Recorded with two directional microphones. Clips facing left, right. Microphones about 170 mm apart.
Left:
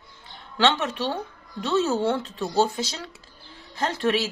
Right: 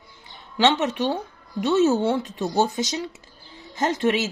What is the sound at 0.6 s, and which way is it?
Speech, 20° right (ahead or behind).